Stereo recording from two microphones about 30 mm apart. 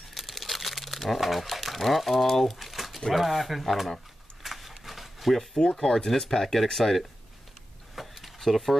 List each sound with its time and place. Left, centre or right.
0.1 s crumpling: centre
1.1 s speech: centre
4.4 s a sound: centre
5.5 s speech: left
6.3 s speech: centre
7.9 s a sound: centre
8.4 s speech: centre